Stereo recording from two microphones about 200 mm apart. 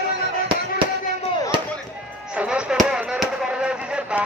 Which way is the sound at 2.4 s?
5° right (ahead or behind).